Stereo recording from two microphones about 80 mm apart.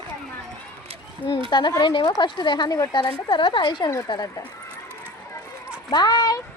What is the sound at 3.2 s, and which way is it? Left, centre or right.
Speech, left.